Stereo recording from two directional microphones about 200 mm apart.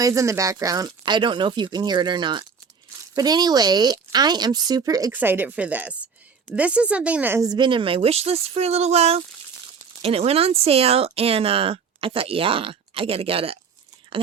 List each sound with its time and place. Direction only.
0.0 s speech: 15° right (ahead or behind)